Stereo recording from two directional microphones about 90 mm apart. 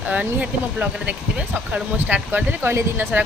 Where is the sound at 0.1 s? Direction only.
15° right (ahead or behind).